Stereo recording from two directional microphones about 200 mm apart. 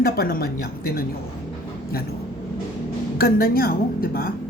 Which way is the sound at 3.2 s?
50° left (ahead or behind).